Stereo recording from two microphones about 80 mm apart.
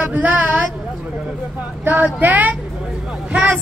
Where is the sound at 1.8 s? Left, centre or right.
Right.